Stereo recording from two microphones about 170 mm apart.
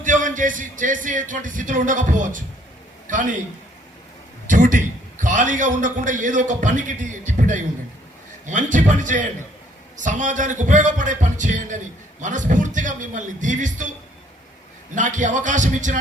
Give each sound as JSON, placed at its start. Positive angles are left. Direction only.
{"t": 0.0, "sound": "a man's voice", "side_deg": -50}
{"t": 4.4, "sound": "a man's voice", "side_deg": -50}
{"t": 14.9, "sound": "a man's voice", "side_deg": -45}